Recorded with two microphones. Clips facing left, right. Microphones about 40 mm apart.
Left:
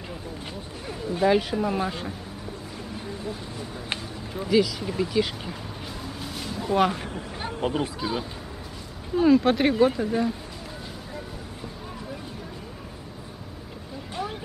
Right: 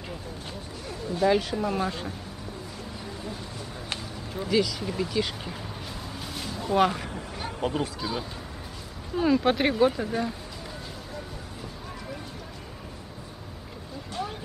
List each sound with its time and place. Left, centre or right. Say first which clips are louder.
0.8 s speech: left 2 dB; centre
4.3 s speech: left 3 dB; centre
6.2 s a sound: left 2 dB; centre
7.2 s a sound: left 2 dB; centre
8.0 s speech: left 3 dB; centre
9.1 s speech: left 4 dB; centre